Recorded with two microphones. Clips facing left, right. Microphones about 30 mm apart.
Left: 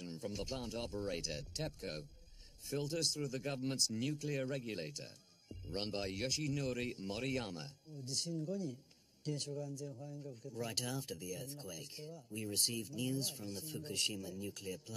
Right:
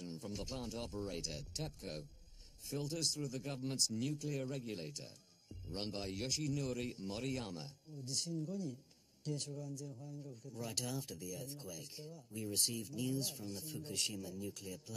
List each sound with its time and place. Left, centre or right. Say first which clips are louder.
0.2 s speech: left 4 dB; centre